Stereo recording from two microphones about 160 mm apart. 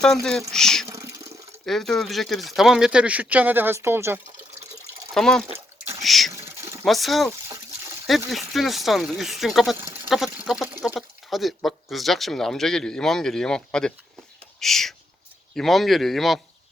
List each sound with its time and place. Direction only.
0.0 s speech: 5° left (ahead or behind)
0.9 s water: 20° right (ahead or behind)
1.6 s speech: centre (ahead or behind); by 4.2 s 15° right (ahead or behind)
5.1 s speech: 5° left (ahead or behind)
6.3 s a sound: 15° right (ahead or behind)
6.8 s speech: centre (ahead or behind)
8.3 s speech: centre (ahead or behind)
9.7 s a sound: 15° right (ahead or behind)
10.1 s a sound: centre (ahead or behind)
11.3 s speech: centre (ahead or behind)